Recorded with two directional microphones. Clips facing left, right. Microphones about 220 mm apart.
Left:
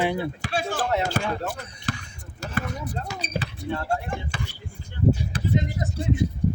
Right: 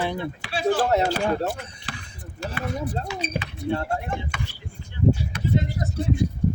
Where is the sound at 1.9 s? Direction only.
45° left (ahead or behind).